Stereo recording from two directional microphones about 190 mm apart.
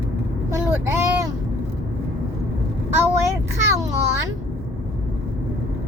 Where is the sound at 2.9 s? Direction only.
10° right (ahead or behind).